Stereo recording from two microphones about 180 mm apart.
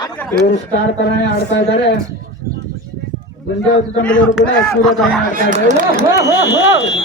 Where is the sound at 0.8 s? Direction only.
75° left (ahead or behind).